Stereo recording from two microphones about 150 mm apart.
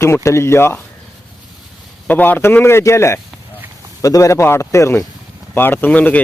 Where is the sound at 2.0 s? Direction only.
10° left (ahead or behind).